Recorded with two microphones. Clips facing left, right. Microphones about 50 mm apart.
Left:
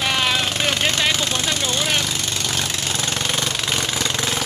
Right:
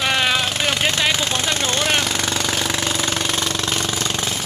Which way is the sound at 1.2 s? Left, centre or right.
Right.